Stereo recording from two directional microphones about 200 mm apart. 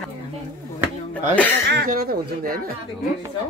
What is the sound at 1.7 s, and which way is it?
Speech, 50° right (ahead or behind).